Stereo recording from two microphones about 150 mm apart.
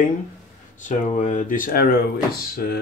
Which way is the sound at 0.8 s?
60° left (ahead or behind).